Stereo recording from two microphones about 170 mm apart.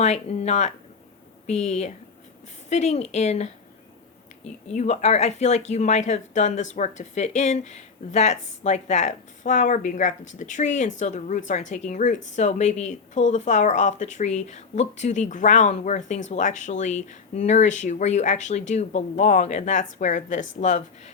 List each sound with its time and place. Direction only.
0.0 s a woman's voice: 40° left (ahead or behind)